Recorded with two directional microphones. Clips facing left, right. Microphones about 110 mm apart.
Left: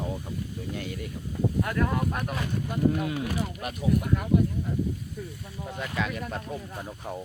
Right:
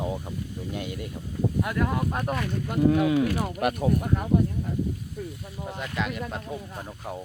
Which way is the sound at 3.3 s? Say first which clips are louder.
Right 6 dB; 55° right (ahead or behind).